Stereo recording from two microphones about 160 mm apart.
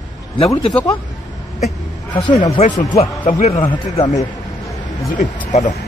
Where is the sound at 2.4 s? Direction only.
45° left (ahead or behind).